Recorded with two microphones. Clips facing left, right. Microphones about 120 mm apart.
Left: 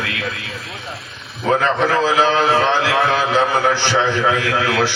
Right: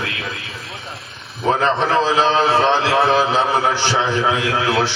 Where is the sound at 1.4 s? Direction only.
30° right (ahead or behind).